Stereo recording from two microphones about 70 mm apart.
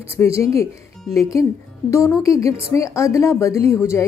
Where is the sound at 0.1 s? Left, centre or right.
Left.